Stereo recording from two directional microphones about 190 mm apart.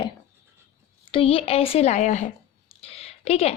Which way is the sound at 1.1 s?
30° left (ahead or behind).